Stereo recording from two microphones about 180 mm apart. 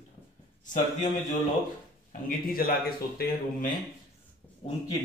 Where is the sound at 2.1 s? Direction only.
55° left (ahead or behind).